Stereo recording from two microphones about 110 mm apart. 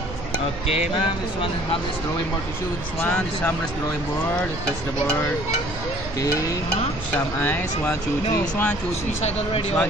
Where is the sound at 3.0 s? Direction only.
15° left (ahead or behind).